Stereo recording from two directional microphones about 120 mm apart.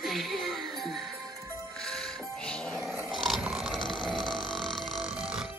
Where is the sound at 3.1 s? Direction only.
Centre (ahead or behind).